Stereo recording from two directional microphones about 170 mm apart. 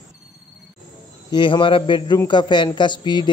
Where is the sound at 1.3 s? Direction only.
30° left (ahead or behind).